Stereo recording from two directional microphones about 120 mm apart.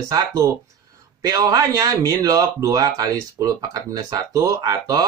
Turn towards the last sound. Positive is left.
turn(degrees=-35)  # may be behind; listen again after turning